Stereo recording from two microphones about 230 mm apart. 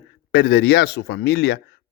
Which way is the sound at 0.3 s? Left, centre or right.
Left.